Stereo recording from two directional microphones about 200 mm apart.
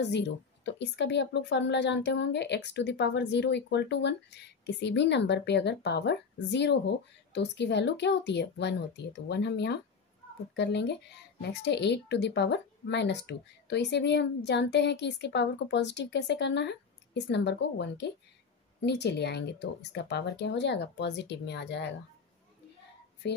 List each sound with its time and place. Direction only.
0.0 s speech: 60° left (ahead or behind)
23.2 s speech: 60° left (ahead or behind)